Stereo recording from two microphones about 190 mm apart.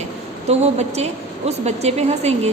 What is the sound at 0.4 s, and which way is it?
A woman's voice, 35° right (ahead or behind).